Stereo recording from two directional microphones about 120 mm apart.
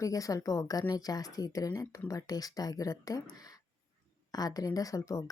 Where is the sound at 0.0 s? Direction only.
30° left (ahead or behind).